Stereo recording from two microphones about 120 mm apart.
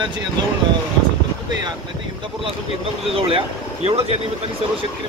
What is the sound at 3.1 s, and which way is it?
Speech, 50° right (ahead or behind).